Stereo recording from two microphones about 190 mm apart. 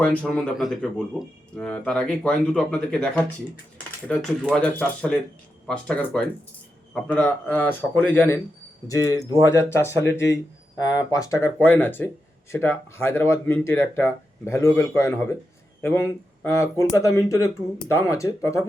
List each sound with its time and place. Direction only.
0.0 s speech: 5° left (ahead or behind)